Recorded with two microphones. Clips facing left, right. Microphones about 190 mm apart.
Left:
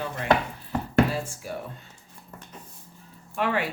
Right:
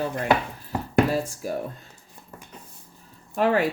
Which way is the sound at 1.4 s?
40° right (ahead or behind).